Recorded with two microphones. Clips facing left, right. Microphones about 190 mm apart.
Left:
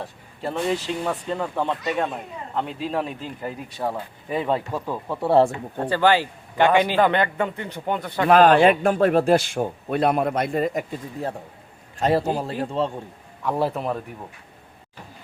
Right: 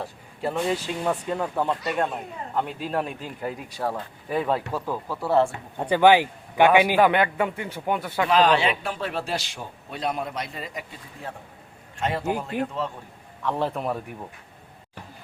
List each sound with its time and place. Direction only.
0.0 s speech: centre (ahead or behind)
5.0 s speech: 25° left (ahead or behind)
5.9 s a man's voice: 15° right (ahead or behind)
8.3 s a man's voice: 50° left (ahead or behind); by 12.9 s 30° left (ahead or behind)
13.4 s a man's voice: 10° left (ahead or behind)